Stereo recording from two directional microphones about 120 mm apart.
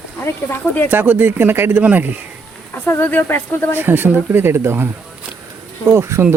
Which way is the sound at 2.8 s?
15° left (ahead or behind).